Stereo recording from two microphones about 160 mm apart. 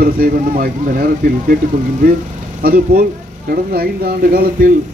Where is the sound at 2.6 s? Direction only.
65° right (ahead or behind).